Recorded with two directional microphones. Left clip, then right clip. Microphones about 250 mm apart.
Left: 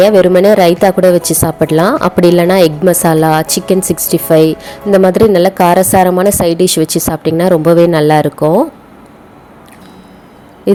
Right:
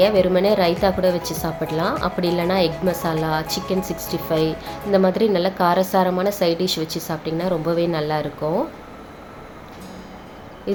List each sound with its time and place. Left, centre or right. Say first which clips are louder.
0.0 s a woman's voice: left 10 dB; left